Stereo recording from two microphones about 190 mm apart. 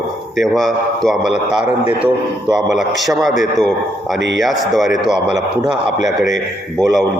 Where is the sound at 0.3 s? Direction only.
Centre (ahead or behind).